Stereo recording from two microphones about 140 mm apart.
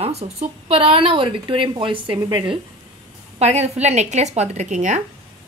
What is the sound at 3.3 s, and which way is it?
A woman's voice, 50° right (ahead or behind).